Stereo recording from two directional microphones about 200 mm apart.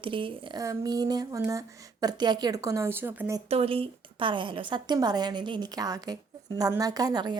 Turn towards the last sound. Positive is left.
turn(degrees=-20)  # may be behind; listen again after turning